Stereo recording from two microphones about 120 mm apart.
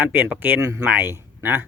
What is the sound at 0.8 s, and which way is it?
Speech, 15° right (ahead or behind).